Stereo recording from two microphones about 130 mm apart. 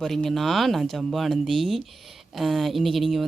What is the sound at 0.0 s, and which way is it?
Speech, 5° left (ahead or behind).